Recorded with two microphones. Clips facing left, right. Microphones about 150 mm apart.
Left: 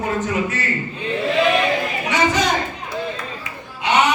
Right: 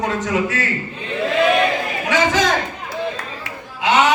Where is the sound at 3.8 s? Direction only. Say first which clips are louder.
Right 2 dB; 90° right.